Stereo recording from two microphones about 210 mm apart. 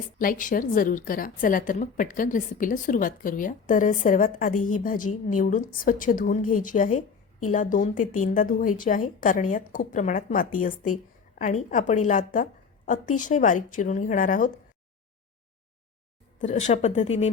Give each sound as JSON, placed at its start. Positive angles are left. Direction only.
{"t": 0.2, "sound": "a woman's voice", "side_deg": 40}
{"t": 16.4, "sound": "a woman's voice", "side_deg": 35}